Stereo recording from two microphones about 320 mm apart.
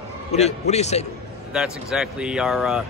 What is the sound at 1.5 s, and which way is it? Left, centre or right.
Speech, centre.